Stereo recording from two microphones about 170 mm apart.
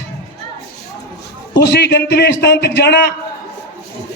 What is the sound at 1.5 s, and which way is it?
A man's voice, 85° left.